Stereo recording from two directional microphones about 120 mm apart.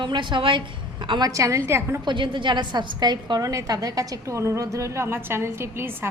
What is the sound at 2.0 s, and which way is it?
A woman's voice, 40° right (ahead or behind).